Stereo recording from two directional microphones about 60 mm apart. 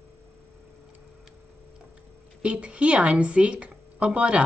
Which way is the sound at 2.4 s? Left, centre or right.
Centre.